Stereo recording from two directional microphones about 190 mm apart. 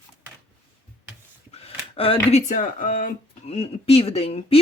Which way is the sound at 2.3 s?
40° left (ahead or behind).